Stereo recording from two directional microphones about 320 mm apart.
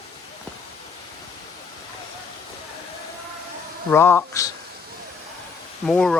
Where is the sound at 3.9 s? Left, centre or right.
Centre.